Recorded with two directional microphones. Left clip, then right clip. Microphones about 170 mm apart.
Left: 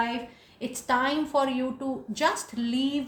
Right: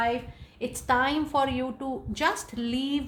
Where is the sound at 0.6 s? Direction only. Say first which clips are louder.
Right 1 dB; 40° right (ahead or behind).